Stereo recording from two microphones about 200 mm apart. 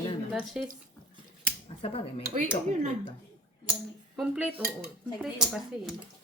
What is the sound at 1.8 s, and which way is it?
Speech, 30° left (ahead or behind).